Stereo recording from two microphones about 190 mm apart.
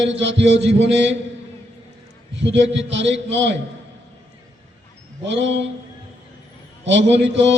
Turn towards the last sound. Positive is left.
turn(degrees=-70)  # may be behind; listen again after turning